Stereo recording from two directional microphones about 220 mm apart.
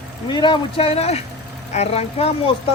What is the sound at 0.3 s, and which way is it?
Speech, 20° left (ahead or behind).